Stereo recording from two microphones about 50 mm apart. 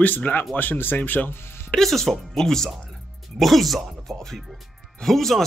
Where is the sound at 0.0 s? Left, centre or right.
Left.